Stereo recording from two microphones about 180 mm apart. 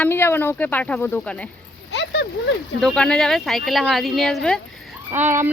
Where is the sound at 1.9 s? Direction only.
75° left (ahead or behind).